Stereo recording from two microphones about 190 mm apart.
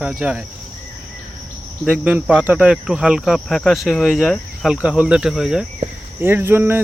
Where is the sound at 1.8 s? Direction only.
5° right (ahead or behind).